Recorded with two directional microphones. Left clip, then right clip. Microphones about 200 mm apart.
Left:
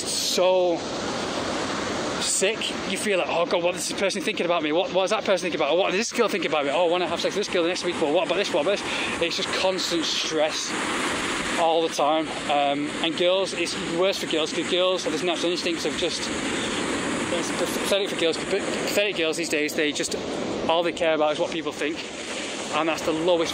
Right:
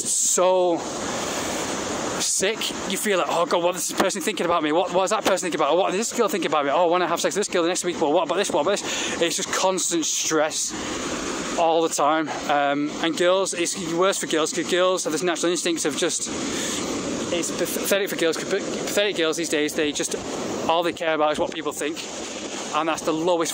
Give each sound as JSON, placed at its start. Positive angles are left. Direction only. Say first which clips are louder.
{"t": 0.4, "sound": "speech", "louder": "right 1 dB", "side_deg": -40}
{"t": 3.1, "sound": "speech", "louder": "right 2 dB", "side_deg": -30}
{"t": 5.9, "sound": "speech", "louder": "even", "side_deg": -10}
{"t": 6.5, "sound": "speech", "louder": "right 2 dB", "side_deg": -30}
{"t": 9.2, "sound": "speech", "louder": "right 3 dB", "side_deg": -40}
{"t": 11.6, "sound": "speech", "louder": "right 2 dB", "side_deg": -40}
{"t": 18.5, "sound": "speech", "louder": "even", "side_deg": -25}
{"t": 21.1, "sound": "speech", "louder": "right 2 dB", "side_deg": -35}
{"t": 22.8, "sound": "speech", "louder": "right 1 dB", "side_deg": -20}
{"t": 23.2, "sound": "speech", "louder": "left 1 dB", "side_deg": -35}